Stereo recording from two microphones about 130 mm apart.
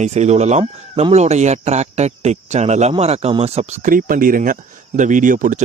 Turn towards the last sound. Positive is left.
turn(degrees=-90)